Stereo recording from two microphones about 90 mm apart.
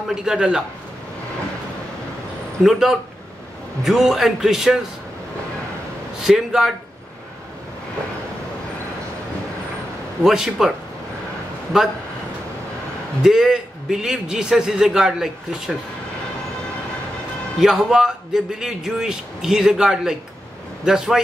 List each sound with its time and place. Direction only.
0.1 s a man's voice: 5° right (ahead or behind)
2.6 s a man's voice: 5° right (ahead or behind)
6.2 s a man's voice: 5° right (ahead or behind)
10.2 s a man's voice: 5° right (ahead or behind)
11.7 s a man's voice: 5° right (ahead or behind)
13.2 s a man's voice: 5° right (ahead or behind)
17.6 s a man's voice: 5° right (ahead or behind)